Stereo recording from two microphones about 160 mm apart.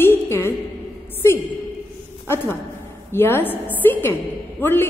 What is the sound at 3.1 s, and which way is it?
A woman's voice, 15° left (ahead or behind).